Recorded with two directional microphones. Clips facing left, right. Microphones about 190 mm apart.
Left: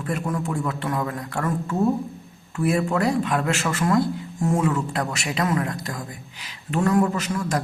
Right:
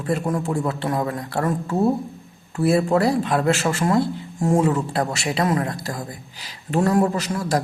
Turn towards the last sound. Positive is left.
turn(degrees=-35)  # may be behind; listen again after turning